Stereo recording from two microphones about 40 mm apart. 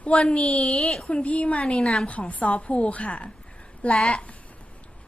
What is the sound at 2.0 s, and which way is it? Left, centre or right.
A woman's voice, left.